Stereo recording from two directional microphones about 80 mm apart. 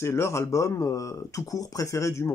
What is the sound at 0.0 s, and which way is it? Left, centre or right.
Speech, left.